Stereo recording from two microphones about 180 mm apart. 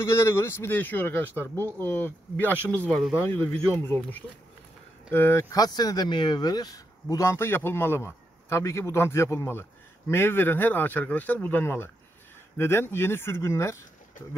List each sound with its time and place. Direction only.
0.0 s speech: 15° left (ahead or behind)
1.6 s speech: 20° right (ahead or behind)
1.9 s speech: 10° left (ahead or behind)